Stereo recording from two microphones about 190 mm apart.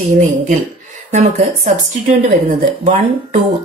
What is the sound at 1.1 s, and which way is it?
A woman's voice, 35° right (ahead or behind).